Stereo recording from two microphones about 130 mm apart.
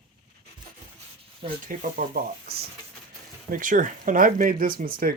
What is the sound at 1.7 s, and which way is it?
Speech, 90° right.